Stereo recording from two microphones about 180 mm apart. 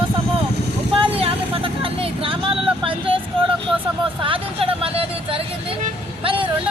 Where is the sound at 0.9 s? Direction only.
30° right (ahead or behind).